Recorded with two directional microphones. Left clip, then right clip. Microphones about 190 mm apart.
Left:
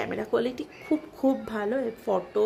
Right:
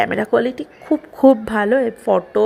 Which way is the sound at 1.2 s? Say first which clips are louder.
Right 14 dB; 35° right (ahead or behind).